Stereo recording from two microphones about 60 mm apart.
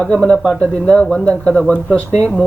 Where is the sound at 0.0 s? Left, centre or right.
Centre.